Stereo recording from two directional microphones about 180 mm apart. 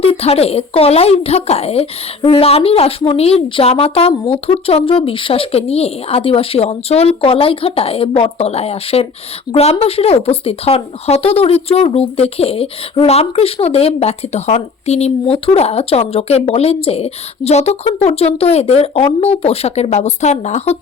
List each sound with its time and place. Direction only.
0.0 s speech: 35° left (ahead or behind)